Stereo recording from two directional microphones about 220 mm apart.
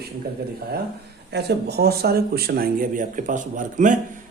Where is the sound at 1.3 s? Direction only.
50° right (ahead or behind).